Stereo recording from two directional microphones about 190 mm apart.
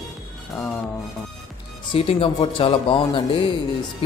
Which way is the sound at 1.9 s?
30° left (ahead or behind).